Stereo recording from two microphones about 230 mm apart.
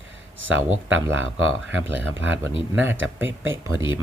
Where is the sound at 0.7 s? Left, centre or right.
Right.